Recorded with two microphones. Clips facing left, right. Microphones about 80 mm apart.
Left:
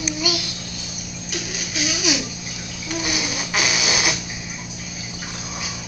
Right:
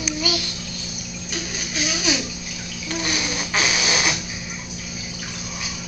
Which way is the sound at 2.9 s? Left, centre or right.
Centre.